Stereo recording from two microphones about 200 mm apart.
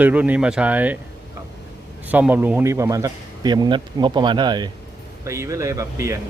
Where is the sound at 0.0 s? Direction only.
5° right (ahead or behind).